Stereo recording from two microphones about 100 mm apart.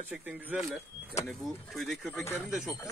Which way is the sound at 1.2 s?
Centre (ahead or behind).